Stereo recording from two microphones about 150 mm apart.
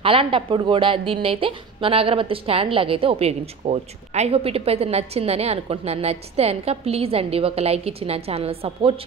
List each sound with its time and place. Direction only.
0.0 s a woman's voice: 35° right (ahead or behind)